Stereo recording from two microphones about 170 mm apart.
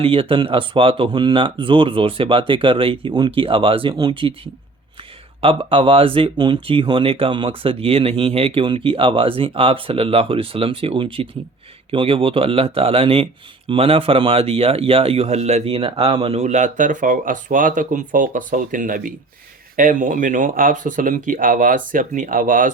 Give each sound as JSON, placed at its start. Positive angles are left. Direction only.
{"t": 0.0, "sound": "speech", "side_deg": -35}
{"t": 5.4, "sound": "speech", "side_deg": -30}